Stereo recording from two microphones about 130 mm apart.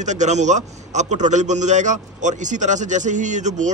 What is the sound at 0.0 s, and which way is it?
A man's voice, 65° right (ahead or behind).